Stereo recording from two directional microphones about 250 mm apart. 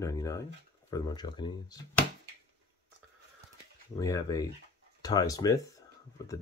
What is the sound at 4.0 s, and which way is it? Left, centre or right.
Speech, centre.